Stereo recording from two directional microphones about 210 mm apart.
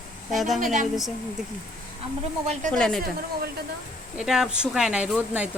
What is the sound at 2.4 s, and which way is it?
Speech, 30° right (ahead or behind).